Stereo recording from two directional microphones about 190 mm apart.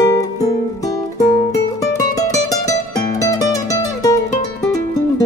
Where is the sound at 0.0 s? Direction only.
20° left (ahead or behind).